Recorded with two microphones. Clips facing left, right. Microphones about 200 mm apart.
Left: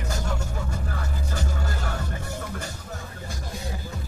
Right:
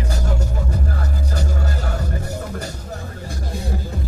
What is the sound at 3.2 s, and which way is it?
Music, 55° right (ahead or behind).